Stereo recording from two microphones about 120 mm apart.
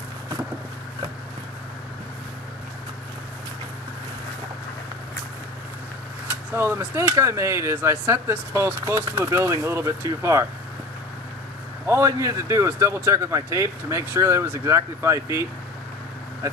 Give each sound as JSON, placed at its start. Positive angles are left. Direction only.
{"t": 6.5, "sound": "speech", "side_deg": -20}
{"t": 11.9, "sound": "speech", "side_deg": -25}